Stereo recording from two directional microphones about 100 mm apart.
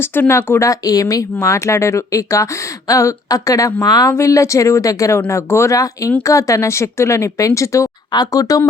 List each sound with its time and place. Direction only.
0.2 s speech: 25° left (ahead or behind)
0.7 s speech: 35° left (ahead or behind)